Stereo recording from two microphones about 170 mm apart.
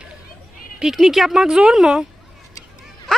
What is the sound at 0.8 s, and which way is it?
Speech, centre (ahead or behind).